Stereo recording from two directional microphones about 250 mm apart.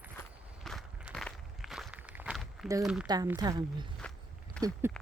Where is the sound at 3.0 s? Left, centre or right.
Centre.